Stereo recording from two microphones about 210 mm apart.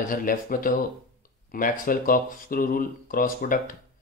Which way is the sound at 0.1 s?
40° left (ahead or behind).